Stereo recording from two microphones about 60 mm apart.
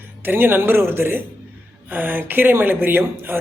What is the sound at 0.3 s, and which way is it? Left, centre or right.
Speech, right.